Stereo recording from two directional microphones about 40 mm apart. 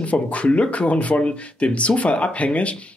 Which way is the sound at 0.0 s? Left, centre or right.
Left.